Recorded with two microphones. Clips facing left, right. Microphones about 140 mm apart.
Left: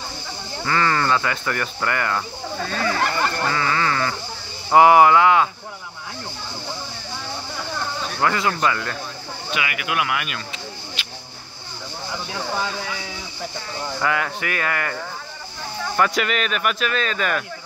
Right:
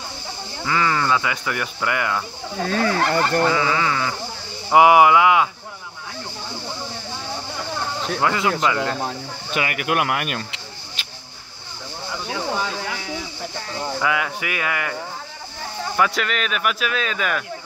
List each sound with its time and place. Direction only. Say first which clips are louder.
0.7 s speech: even; 5° right (ahead or behind)
2.6 s speech: right 3 dB; 45° right (ahead or behind)
3.4 s speech: right 2 dB; 10° right (ahead or behind)
8.2 s speech: even; 15° right (ahead or behind)
9.5 s speech: right 3 dB; 45° right (ahead or behind)
14.0 s speech: left 1 dB; 5° right (ahead or behind)
16.0 s speech: left 1 dB; centre (ahead or behind)